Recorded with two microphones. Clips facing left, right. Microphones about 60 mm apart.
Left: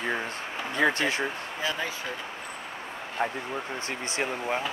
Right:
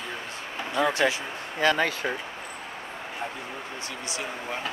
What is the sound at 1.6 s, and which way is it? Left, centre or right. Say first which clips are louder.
Speech: right 8 dB; right.